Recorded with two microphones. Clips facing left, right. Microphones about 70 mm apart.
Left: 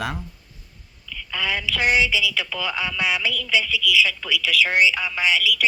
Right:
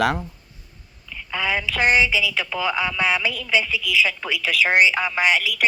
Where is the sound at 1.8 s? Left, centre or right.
Right.